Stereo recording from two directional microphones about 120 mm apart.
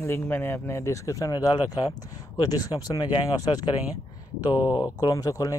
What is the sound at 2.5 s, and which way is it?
Speech, 30° left (ahead or behind).